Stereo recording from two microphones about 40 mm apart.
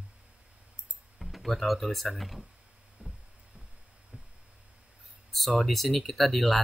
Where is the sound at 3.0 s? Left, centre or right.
Right.